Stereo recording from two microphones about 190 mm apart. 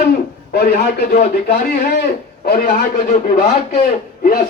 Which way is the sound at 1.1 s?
35° left (ahead or behind).